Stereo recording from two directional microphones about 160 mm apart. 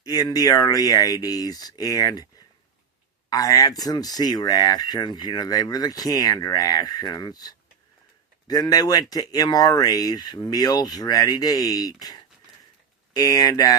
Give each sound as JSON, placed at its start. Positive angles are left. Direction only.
{"t": 0.0, "sound": "speech", "side_deg": 25}
{"t": 3.2, "sound": "speech", "side_deg": 20}